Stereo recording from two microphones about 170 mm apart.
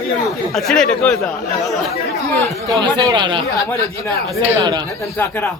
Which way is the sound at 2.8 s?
25° right (ahead or behind).